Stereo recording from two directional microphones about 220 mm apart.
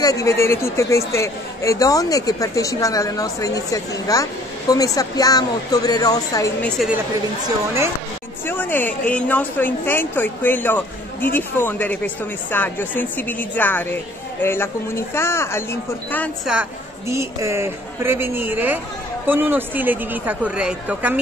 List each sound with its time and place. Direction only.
0.0 s speech: 15° left (ahead or behind)
8.5 s speech: 10° left (ahead or behind)
17.1 s speech: 10° right (ahead or behind)